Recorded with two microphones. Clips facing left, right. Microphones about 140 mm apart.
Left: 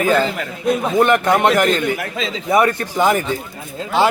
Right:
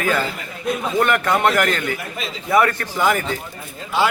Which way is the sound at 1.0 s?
20° left (ahead or behind).